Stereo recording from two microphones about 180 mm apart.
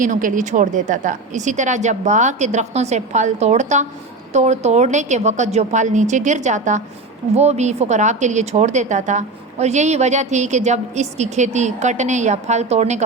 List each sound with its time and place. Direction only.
0.0 s a woman's voice: 45° right (ahead or behind)